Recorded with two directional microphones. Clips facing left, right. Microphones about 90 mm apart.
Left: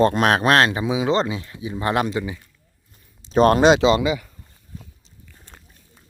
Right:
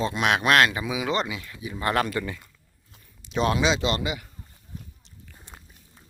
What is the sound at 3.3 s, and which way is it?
Speech, 45° left (ahead or behind).